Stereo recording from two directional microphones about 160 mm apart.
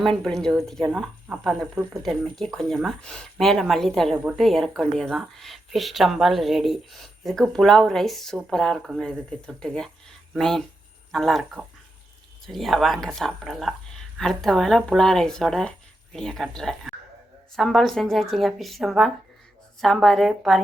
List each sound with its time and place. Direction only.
0.0 s speech: 5° left (ahead or behind)